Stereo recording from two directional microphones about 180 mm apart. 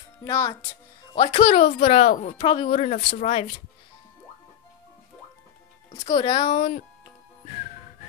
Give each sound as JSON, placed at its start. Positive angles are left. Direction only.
{"t": 0.2, "sound": "speech", "side_deg": 20}
{"t": 6.0, "sound": "speech", "side_deg": 25}